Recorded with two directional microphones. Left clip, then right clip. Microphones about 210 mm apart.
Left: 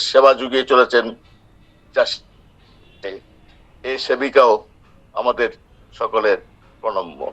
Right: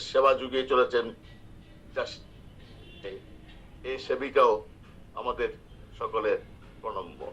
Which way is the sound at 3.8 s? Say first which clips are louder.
Left 11 dB; 50° left (ahead or behind).